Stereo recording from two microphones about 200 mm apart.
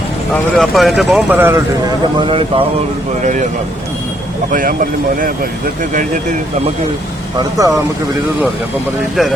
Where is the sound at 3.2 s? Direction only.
40° right (ahead or behind).